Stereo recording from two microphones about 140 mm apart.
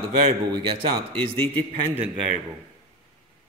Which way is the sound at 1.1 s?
40° right (ahead or behind).